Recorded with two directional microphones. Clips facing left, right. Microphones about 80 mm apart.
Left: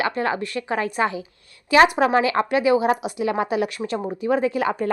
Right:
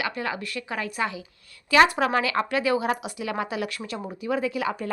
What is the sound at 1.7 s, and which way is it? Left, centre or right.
Speech, left.